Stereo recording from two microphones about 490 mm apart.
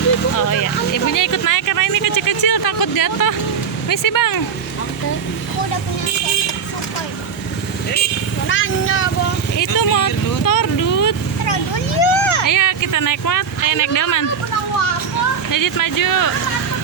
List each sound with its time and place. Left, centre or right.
0.3 s vehicle: left
3.8 s speech: left
8.4 s speech: left
9.6 s vehicle: left
11.5 s vehicle: left
12.5 s speech: left
15.4 s speech: left